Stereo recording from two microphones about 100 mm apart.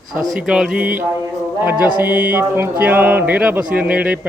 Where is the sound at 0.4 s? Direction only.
5° right (ahead or behind).